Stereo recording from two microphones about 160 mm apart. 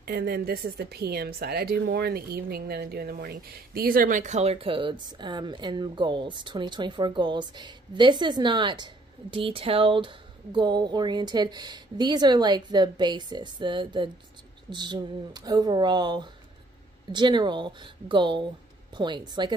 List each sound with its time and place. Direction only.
0.0 s a woman's voice: 75° right (ahead or behind); by 19.5 s 30° right (ahead or behind)